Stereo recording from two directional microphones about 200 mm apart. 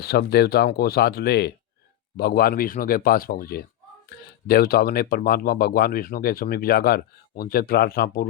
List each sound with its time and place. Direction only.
0.0 s speech: 50° left (ahead or behind)